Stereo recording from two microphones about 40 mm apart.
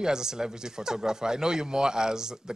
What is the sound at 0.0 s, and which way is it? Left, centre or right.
Speech, centre.